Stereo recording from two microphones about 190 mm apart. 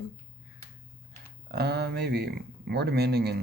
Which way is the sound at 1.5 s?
60° right (ahead or behind).